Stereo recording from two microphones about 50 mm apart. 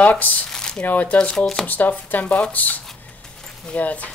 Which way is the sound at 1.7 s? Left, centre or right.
Left.